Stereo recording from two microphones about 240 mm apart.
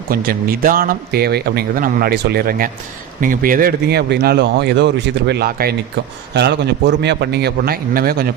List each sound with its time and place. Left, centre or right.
0.1 s a man's voice: right